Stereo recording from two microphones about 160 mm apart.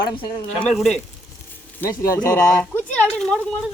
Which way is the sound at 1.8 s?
20° left (ahead or behind).